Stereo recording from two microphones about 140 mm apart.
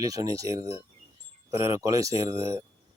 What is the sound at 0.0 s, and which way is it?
Speech, 25° right (ahead or behind).